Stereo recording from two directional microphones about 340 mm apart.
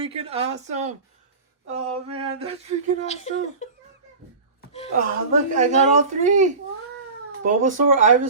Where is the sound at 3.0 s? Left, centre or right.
Centre.